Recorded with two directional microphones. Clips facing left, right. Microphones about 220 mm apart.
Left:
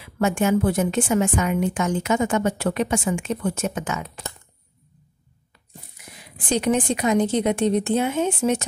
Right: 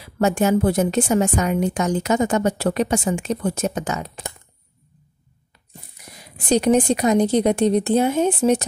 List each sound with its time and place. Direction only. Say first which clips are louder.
0.0 s a woman's voice: right 2 dB; 40° right (ahead or behind)
6.1 s a woman's voice: right 5 dB; 40° right (ahead or behind)